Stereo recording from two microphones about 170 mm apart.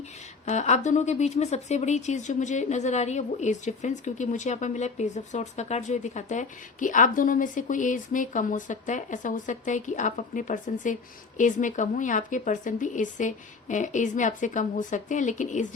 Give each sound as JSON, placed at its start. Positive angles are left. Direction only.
{"t": 0.4, "sound": "speech", "side_deg": 45}